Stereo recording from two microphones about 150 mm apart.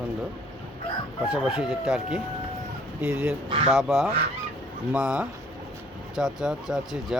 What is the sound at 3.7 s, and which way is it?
Speech, centre (ahead or behind).